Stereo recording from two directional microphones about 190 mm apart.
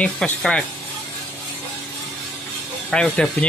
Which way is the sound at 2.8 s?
5° left (ahead or behind).